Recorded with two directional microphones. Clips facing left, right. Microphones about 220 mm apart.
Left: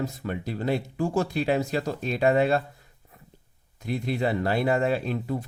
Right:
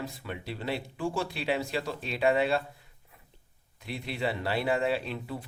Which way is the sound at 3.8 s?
45° left (ahead or behind).